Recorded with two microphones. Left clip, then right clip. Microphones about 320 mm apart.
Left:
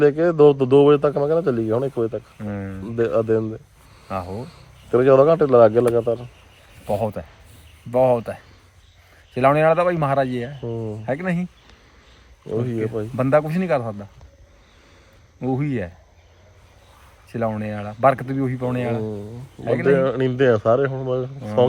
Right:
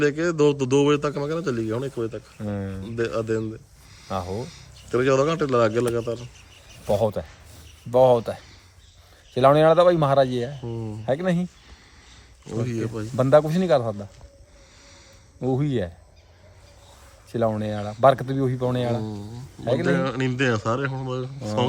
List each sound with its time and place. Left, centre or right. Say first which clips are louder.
0.0 s a man's voice: left 6 dB; centre
2.4 s speech: even; centre
2.8 s a man's voice: left 7 dB; centre
4.1 s speech: left 1 dB; centre
4.4 s a man's voice: left 3 dB; centre
6.8 s speech: right 1 dB; centre
12.5 s speech: left 5 dB; centre
15.4 s speech: even; centre
17.3 s speech: right 1 dB; centre